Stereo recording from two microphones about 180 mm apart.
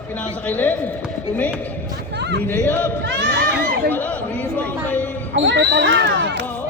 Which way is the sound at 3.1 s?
75° right (ahead or behind).